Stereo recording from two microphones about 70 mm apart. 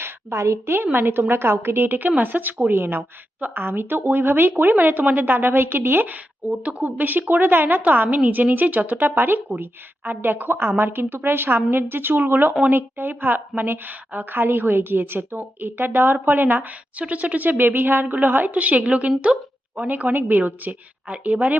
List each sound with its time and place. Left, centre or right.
0.0 s a woman's voice: right